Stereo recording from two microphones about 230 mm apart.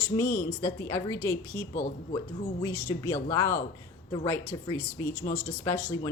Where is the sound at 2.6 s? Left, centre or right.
Centre.